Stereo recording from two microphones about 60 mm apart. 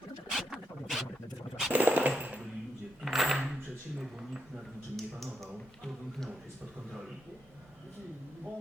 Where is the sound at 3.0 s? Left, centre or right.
Centre.